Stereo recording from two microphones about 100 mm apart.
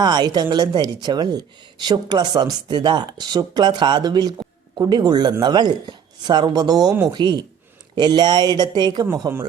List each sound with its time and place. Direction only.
0.0 s speech: 45° right (ahead or behind)